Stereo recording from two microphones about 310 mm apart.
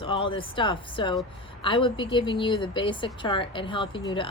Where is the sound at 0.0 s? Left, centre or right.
Centre.